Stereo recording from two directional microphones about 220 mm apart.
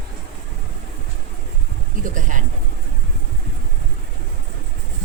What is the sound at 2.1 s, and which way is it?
Speech, 35° right (ahead or behind).